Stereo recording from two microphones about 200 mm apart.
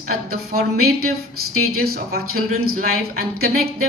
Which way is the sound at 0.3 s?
50° right (ahead or behind).